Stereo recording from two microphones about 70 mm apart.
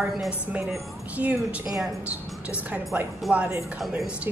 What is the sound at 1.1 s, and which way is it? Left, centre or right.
A woman's voice, right.